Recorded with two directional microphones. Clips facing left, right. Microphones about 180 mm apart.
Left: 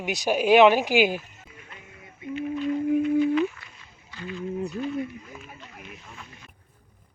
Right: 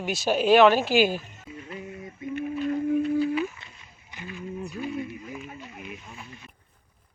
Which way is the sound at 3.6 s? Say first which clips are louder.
Even; 25° right (ahead or behind).